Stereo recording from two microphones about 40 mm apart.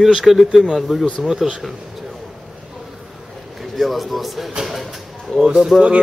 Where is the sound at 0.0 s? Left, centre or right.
Centre.